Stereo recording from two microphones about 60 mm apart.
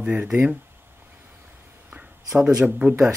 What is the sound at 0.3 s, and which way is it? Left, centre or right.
Speech, centre.